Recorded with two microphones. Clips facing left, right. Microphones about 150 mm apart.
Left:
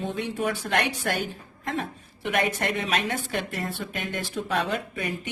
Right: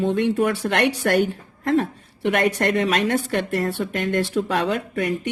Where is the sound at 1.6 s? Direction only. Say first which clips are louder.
Right 10 dB; 65° right (ahead or behind).